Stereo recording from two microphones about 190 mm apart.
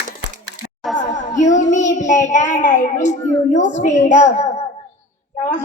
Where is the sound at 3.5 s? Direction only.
40° left (ahead or behind).